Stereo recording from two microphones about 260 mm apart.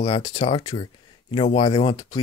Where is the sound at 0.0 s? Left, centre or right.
Centre.